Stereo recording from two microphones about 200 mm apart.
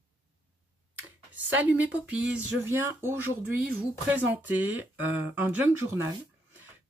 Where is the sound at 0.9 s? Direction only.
10° right (ahead or behind).